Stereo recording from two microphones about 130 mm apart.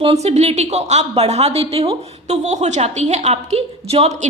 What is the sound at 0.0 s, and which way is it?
A woman's voice, 50° right (ahead or behind).